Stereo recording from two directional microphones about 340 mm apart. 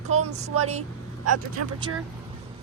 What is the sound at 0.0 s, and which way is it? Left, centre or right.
Speech, centre.